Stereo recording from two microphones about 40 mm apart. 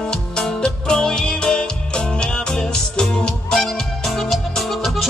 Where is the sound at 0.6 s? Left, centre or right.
Centre.